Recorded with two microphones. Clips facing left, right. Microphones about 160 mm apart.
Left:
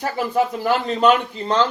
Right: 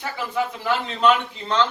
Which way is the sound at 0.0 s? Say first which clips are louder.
Left 5 dB; 45° left (ahead or behind).